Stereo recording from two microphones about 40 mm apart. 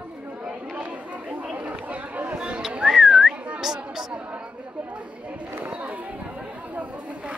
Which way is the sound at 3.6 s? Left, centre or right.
Centre.